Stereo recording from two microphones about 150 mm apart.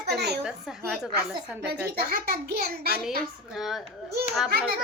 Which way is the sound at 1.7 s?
90° right.